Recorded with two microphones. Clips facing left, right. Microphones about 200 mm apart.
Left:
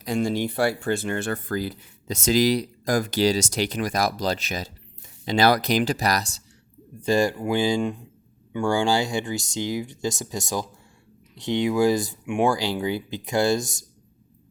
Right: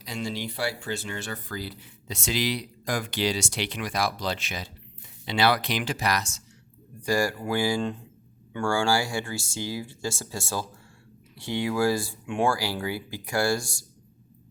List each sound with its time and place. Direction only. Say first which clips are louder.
0.0 s speech: left 8 dB; 50° left (ahead or behind)
7.0 s speech: left 4 dB; 20° left (ahead or behind)